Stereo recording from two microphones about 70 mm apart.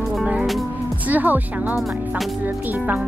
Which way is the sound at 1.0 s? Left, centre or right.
Right.